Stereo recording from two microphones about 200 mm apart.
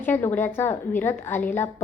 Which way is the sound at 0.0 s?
10° left (ahead or behind).